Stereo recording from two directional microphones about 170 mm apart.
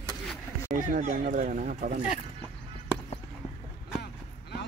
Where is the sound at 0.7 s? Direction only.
50° right (ahead or behind).